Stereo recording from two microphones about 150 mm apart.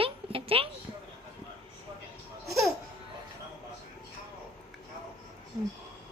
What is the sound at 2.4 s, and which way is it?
Babbling, centre (ahead or behind).